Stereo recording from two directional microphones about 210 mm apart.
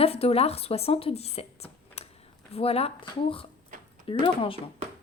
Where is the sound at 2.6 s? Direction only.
30° left (ahead or behind).